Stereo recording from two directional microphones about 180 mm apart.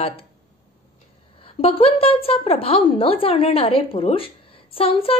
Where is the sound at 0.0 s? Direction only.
30° left (ahead or behind).